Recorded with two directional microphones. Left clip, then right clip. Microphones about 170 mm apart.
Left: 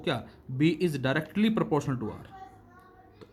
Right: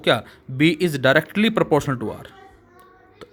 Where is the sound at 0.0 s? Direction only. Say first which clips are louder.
Right 13 dB; 35° right (ahead or behind).